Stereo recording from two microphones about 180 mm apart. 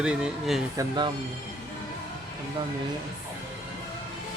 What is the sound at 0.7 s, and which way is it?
Speech, 25° right (ahead or behind).